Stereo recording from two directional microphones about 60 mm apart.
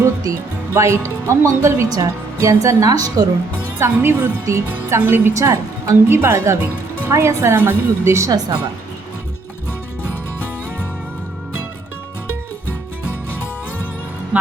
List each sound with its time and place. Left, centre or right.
0.7 s speech: right
3.8 s a woman's voice: right
4.9 s a woman's voice: right
5.3 s speech: right
6.1 s a woman's voice: right
8.3 s a woman's voice: right